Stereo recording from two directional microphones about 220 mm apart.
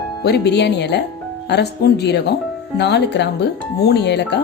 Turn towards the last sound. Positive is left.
turn(degrees=50)  # may be behind; listen again after turning